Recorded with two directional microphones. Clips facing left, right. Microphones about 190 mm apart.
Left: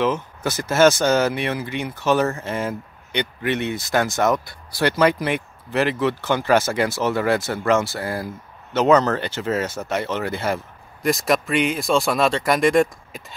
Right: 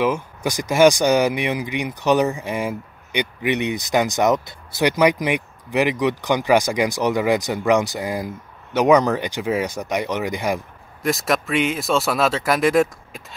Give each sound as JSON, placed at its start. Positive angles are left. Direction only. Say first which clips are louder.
{"t": 0.0, "sound": "speech", "louder": "right 1 dB", "side_deg": -10}
{"t": 11.0, "sound": "speech", "louder": "left 1 dB", "side_deg": 0}